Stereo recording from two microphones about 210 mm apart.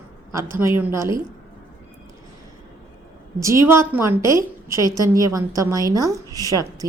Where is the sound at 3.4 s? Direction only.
15° right (ahead or behind).